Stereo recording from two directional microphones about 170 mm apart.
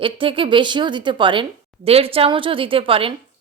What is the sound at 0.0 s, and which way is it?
A woman's voice, 30° right (ahead or behind).